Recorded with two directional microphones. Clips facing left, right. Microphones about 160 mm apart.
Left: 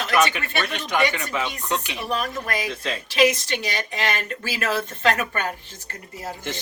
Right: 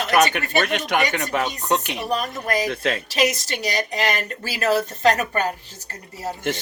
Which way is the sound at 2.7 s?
60° right (ahead or behind).